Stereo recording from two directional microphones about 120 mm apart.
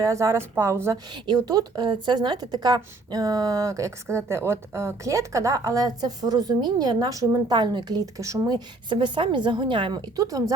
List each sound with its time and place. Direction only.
0.0 s a woman's voice: 25° right (ahead or behind)
1.3 s a woman's voice: 30° right (ahead or behind)
10.2 s a woman's voice: 30° right (ahead or behind)